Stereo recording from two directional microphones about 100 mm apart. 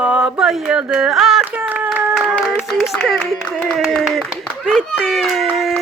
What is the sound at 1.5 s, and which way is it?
Clapping, 15° right (ahead or behind).